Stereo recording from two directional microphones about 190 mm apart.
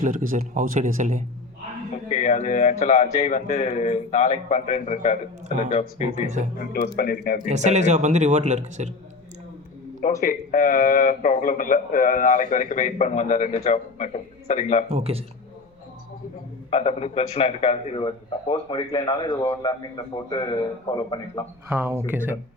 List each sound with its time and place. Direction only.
0.0 s speech: 45° right (ahead or behind)
2.0 s a man's voice: 40° left (ahead or behind)
6.6 s speech: 50° left (ahead or behind)
7.5 s speech: 40° right (ahead or behind)
10.0 s speech: 45° left (ahead or behind)
14.8 s speech: 30° right (ahead or behind)
16.6 s a man's voice: 30° left (ahead or behind)
21.7 s speech: 10° right (ahead or behind)